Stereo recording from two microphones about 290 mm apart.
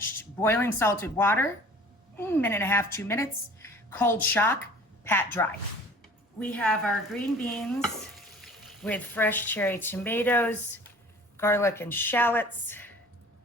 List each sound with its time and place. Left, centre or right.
0.0 s a woman's voice: centre